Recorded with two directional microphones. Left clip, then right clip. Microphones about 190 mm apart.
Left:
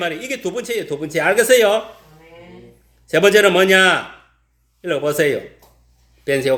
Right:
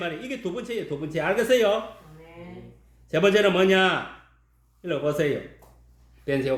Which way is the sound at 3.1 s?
25° left (ahead or behind).